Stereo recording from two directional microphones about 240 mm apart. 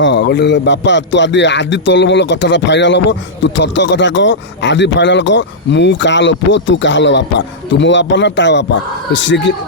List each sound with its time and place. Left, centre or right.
0.0 s a man's voice: left